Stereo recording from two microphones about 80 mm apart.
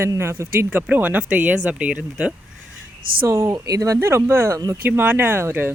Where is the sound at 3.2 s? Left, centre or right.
Right.